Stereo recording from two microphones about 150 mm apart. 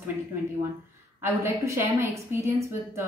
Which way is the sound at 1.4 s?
15° right (ahead or behind).